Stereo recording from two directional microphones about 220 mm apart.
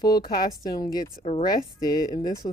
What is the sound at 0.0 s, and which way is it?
Speech, 20° left (ahead or behind).